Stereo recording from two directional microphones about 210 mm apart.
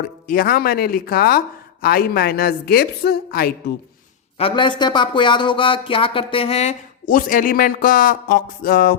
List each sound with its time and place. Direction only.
0.3 s a woman's voice: 45° left (ahead or behind)
4.4 s speech: 25° left (ahead or behind); by 9.0 s 45° left (ahead or behind)